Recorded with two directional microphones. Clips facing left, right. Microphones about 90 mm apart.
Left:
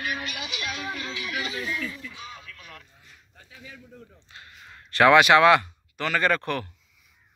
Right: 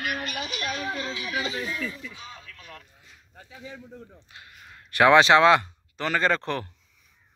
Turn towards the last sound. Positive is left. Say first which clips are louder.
# even
turn(degrees=-20)  # may be behind; listen again after turning